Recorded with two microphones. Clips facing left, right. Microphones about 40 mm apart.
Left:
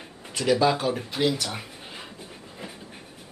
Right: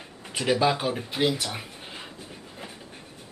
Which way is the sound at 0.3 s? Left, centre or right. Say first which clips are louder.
Left 2 dB; centre.